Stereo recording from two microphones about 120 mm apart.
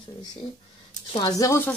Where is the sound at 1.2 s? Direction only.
30° left (ahead or behind).